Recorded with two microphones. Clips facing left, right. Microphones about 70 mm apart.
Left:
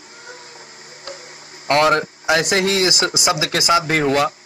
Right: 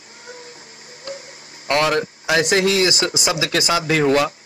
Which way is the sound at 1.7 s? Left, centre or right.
Left.